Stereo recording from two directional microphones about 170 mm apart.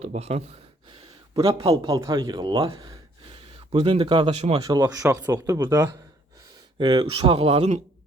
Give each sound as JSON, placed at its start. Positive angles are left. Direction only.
{"t": 0.0, "sound": "speech", "side_deg": -40}
{"t": 1.5, "sound": "speech", "side_deg": -25}
{"t": 4.6, "sound": "speech", "side_deg": -20}
{"t": 6.7, "sound": "speech", "side_deg": -30}